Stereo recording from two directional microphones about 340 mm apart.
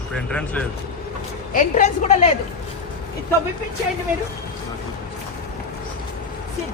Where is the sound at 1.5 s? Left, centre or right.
Left.